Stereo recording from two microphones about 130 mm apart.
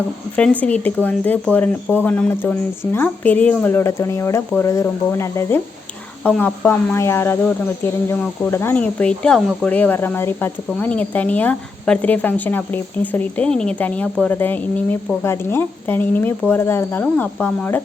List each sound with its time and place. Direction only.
0.6 s speech: 15° left (ahead or behind)